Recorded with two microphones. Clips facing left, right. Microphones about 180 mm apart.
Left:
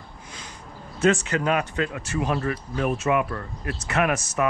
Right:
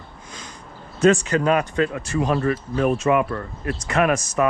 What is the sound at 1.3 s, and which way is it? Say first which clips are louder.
Speech: right 4 dB; 35° right (ahead or behind).